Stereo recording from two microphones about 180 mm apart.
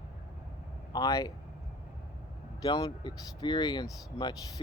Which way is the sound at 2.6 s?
20° left (ahead or behind).